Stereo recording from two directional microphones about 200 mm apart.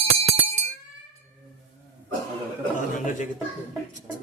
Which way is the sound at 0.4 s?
35° right (ahead or behind).